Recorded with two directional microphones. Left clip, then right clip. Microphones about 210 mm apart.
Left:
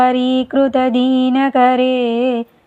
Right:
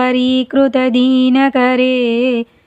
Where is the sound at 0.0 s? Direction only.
20° right (ahead or behind).